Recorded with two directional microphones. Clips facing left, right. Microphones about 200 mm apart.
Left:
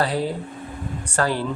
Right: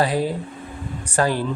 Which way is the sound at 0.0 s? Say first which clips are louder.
Right 2 dB; 15° right (ahead or behind).